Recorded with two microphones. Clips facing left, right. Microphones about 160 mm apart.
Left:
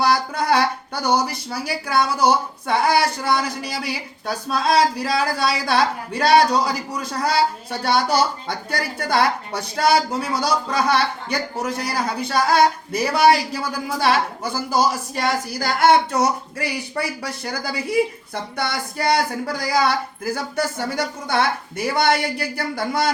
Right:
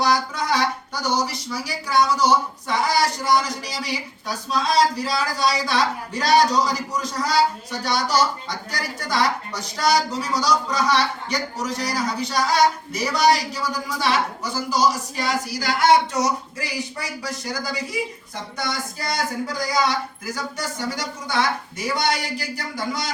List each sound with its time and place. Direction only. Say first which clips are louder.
0.0 s speech: left 2 dB; 60° left (ahead or behind)